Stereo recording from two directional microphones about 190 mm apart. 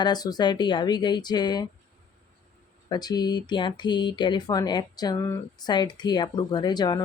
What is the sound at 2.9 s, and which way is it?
Speech, 20° left (ahead or behind).